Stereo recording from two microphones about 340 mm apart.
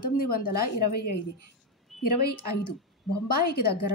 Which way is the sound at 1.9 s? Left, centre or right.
Centre.